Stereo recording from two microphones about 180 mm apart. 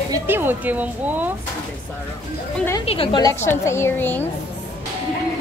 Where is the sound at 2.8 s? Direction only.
30° left (ahead or behind).